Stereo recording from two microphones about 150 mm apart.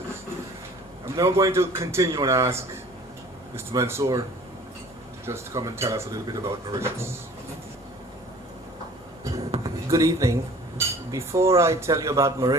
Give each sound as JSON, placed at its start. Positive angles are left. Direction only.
{"t": 1.0, "sound": "speech", "side_deg": -20}
{"t": 5.2, "sound": "speech", "side_deg": -20}
{"t": 9.6, "sound": "a sound", "side_deg": -20}
{"t": 10.8, "sound": "speech", "side_deg": -20}